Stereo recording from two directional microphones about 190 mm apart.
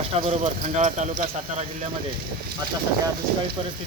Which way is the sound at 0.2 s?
35° right (ahead or behind).